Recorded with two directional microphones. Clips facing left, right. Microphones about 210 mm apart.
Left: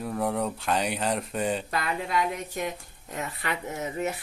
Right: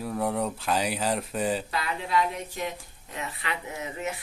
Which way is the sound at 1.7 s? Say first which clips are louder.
Left 1 dB; 50° left (ahead or behind).